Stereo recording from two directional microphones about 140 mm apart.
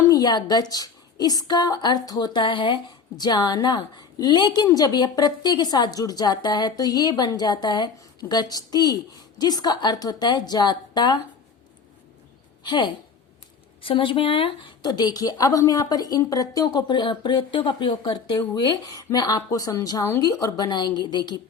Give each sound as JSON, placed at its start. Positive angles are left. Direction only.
{"t": 0.1, "sound": "a woman's voice", "side_deg": 30}
{"t": 12.6, "sound": "a woman's voice", "side_deg": 35}